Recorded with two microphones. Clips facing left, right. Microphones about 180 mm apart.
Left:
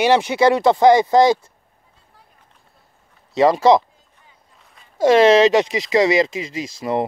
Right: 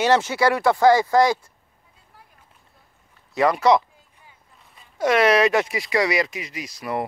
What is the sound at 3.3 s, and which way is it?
Speech, 25° left (ahead or behind).